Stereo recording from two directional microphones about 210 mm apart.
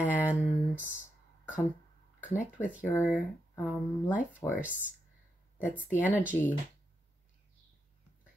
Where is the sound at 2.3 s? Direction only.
40° left (ahead or behind).